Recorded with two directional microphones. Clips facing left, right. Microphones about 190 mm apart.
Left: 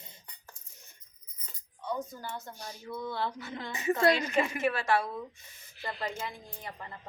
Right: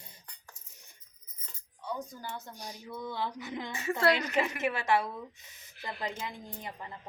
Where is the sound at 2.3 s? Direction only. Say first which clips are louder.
Left 1 dB; 15° right (ahead or behind).